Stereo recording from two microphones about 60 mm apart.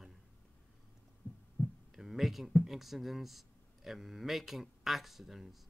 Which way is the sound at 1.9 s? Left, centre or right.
Centre.